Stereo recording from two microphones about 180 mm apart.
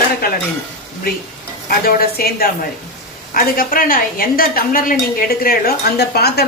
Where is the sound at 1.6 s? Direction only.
55° left (ahead or behind).